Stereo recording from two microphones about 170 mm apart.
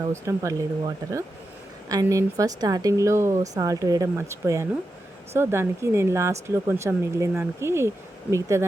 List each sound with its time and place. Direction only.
0.0 s speech: 20° right (ahead or behind)